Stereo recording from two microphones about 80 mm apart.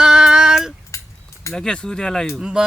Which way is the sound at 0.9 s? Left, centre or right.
Left.